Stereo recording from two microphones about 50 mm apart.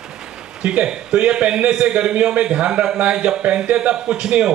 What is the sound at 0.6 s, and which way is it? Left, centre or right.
A man's voice, centre.